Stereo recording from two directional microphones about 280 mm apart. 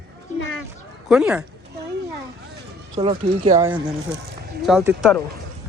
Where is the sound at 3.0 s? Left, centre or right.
Centre.